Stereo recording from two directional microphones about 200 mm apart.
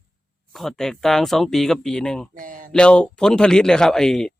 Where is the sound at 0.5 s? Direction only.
Centre (ahead or behind).